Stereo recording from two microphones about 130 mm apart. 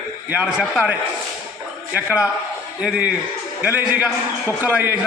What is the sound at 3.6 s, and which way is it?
A man's voice, 10° right (ahead or behind).